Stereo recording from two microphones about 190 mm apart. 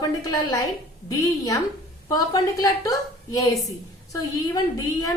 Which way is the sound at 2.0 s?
20° left (ahead or behind).